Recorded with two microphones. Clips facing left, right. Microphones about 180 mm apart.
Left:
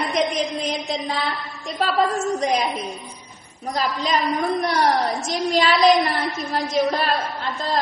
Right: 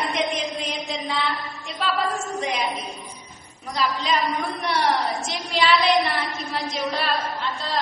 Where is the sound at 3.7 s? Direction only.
40° left (ahead or behind).